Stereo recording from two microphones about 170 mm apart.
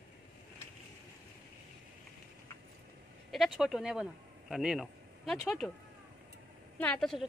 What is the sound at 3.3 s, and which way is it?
Speech, centre (ahead or behind).